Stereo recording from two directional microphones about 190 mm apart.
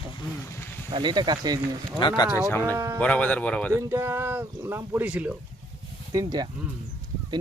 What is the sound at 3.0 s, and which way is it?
Speech, 5° left (ahead or behind).